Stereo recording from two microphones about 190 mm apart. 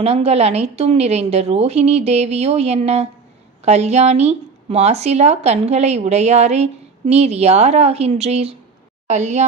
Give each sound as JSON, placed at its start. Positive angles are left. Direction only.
{"t": 0.0, "sound": "speech", "side_deg": -35}